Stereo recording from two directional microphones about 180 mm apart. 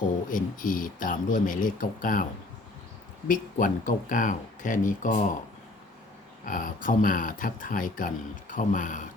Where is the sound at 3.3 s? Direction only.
45° left (ahead or behind).